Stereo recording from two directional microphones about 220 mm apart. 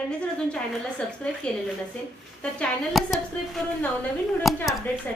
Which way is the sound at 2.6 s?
Centre (ahead or behind).